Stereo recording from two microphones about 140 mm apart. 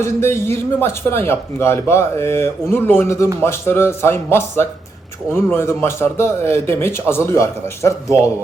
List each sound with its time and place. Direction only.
0.0 s a man's voice: 20° left (ahead or behind)